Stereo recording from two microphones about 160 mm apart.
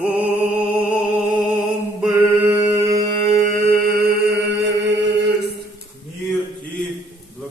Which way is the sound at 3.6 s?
90° right.